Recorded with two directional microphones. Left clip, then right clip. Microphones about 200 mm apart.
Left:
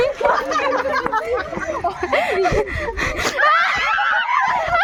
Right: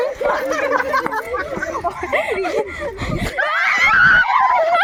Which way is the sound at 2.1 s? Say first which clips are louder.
Left 1 dB; 30° left (ahead or behind).